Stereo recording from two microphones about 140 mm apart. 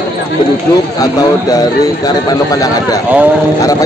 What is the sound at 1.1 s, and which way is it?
Speech, 25° left (ahead or behind).